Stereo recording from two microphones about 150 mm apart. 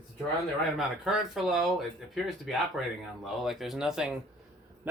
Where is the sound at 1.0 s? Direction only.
Centre (ahead or behind).